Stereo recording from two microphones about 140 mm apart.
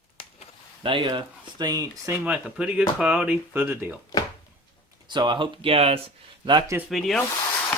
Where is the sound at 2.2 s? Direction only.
10° right (ahead or behind).